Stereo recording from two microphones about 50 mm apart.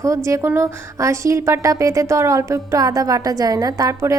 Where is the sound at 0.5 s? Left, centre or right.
Right.